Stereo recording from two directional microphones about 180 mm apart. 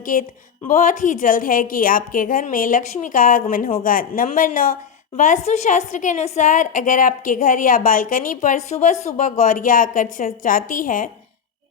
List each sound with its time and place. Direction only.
0.0 s a woman's voice: 50° left (ahead or behind)